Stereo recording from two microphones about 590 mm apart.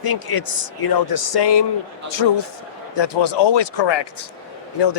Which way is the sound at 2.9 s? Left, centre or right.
Left.